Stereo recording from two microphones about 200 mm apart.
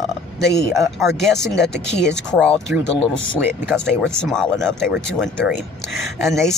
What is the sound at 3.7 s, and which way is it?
Speech, 10° right (ahead or behind).